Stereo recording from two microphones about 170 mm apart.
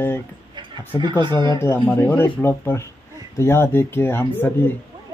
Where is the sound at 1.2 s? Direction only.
25° right (ahead or behind).